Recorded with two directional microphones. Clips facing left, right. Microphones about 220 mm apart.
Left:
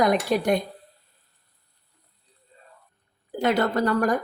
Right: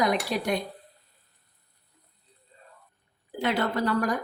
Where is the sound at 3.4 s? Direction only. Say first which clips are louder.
Left 4 dB; 45° left (ahead or behind).